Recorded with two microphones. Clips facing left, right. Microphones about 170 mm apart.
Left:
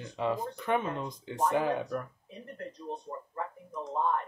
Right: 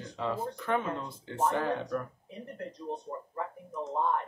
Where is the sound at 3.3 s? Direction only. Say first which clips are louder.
Even; 5° right (ahead or behind).